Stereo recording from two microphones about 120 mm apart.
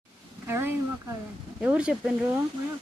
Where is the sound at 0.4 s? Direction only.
20° right (ahead or behind).